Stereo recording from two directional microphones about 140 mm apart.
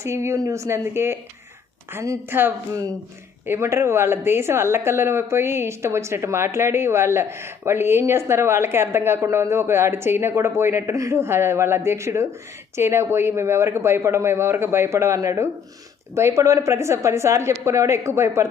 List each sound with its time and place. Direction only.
0.0 s a woman's voice: 20° right (ahead or behind)